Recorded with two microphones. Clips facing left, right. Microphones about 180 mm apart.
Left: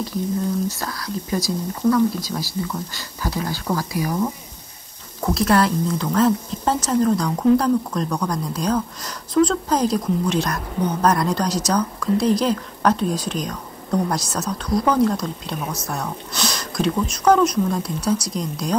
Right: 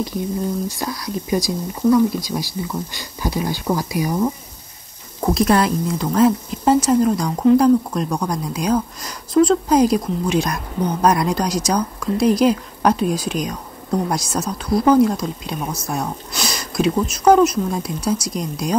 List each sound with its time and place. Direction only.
0.7 s a woman's voice: 15° right (ahead or behind)